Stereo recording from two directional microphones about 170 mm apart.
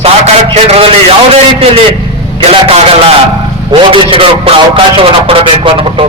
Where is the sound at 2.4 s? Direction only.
35° right (ahead or behind).